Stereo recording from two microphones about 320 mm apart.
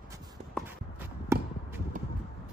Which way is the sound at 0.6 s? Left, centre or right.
Centre.